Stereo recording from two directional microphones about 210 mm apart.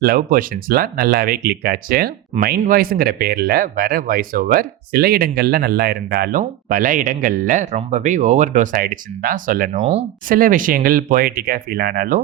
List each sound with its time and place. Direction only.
0.0 s speech: 45° right (ahead or behind)
9.8 s speech: 30° right (ahead or behind)
10.3 s speech: 40° right (ahead or behind)